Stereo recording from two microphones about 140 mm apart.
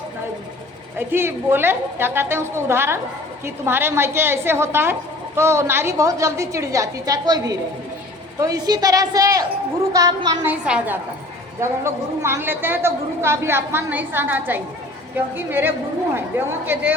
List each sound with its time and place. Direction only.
0.9 s a woman's voice: 15° right (ahead or behind)
10.4 s a woman's voice: 10° right (ahead or behind)